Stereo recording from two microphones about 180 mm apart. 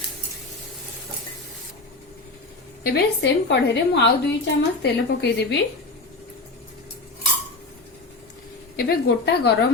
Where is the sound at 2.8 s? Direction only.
70° left (ahead or behind).